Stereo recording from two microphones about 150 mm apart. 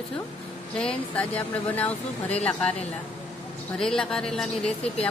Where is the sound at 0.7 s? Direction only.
5° left (ahead or behind).